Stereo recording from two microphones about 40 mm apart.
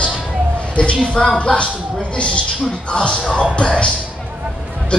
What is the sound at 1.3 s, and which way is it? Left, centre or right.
Speech, left.